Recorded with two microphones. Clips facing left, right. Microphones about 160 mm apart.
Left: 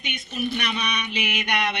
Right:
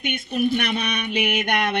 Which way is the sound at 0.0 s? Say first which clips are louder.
Right 6 dB; 55° right (ahead or behind).